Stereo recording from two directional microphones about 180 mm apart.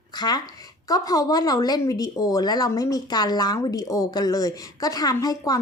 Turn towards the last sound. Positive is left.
turn(degrees=20)  # may be behind; listen again after turning